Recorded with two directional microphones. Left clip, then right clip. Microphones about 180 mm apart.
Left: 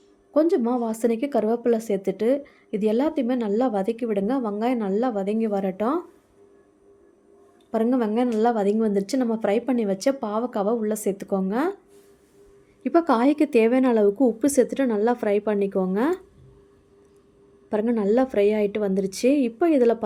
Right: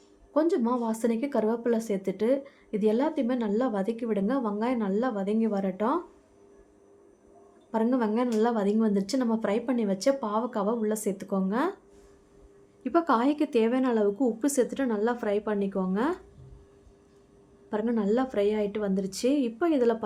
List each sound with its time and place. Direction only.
0.3 s a woman's voice: 20° left (ahead or behind)
7.7 s a woman's voice: 20° left (ahead or behind)
12.8 s a woman's voice: 25° left (ahead or behind)
17.7 s a woman's voice: 25° left (ahead or behind)